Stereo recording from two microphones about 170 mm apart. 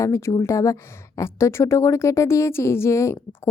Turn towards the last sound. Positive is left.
turn(degrees=15)  # may be behind; listen again after turning